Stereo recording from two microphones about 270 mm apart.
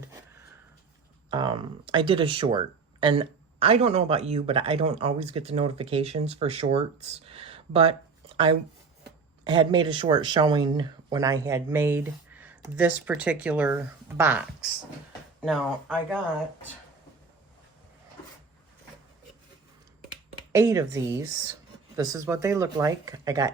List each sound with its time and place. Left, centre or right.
1.3 s speech: centre
9.4 s speech: centre
20.5 s speech: centre